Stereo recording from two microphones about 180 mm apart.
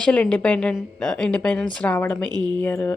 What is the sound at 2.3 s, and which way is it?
Speech, 25° right (ahead or behind).